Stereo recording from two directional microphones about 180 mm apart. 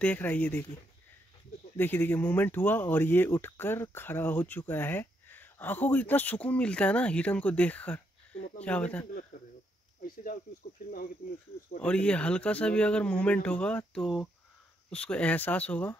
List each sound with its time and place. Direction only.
0.0 s speech: 10° left (ahead or behind)
1.8 s speech: 10° left (ahead or behind)
9.3 s a sound: 50° left (ahead or behind)
10.0 s speech: 50° left (ahead or behind)
11.8 s speech: 5° left (ahead or behind)